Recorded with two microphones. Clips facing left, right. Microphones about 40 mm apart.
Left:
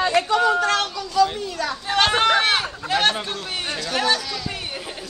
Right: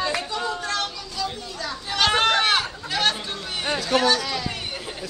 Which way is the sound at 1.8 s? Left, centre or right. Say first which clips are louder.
Left 2 dB; left.